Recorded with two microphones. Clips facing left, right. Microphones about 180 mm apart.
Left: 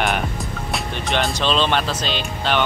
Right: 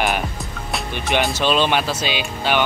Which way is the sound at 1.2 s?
10° right (ahead or behind).